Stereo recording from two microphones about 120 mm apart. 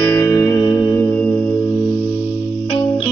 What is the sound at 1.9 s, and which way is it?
Music, 60° right (ahead or behind).